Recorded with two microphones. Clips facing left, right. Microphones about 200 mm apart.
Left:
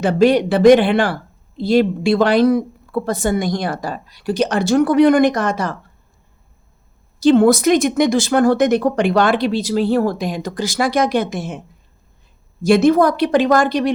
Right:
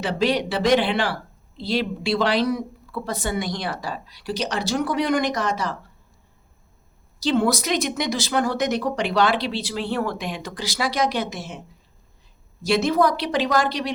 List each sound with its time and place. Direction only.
0.0 s speech: 50° left (ahead or behind)
7.2 s speech: 50° left (ahead or behind)
12.6 s speech: 50° left (ahead or behind)